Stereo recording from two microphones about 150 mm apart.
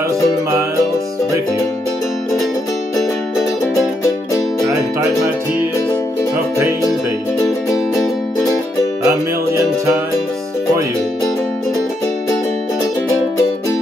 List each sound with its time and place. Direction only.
9.0 s music: 20° right (ahead or behind)